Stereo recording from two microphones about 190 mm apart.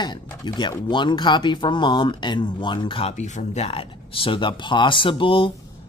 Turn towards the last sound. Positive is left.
turn(degrees=25)  # may be behind; listen again after turning